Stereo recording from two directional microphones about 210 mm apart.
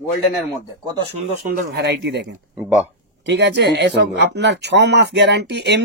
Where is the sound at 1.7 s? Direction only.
50° right (ahead or behind).